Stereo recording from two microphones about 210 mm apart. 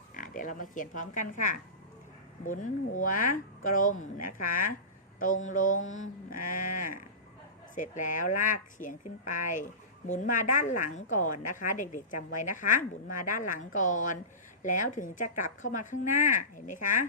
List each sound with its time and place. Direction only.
0.1 s a woman's voice: 40° left (ahead or behind)